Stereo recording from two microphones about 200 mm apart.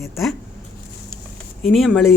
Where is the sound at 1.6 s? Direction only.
Centre (ahead or behind).